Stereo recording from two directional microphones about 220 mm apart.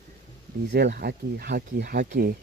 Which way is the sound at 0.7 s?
50° right (ahead or behind).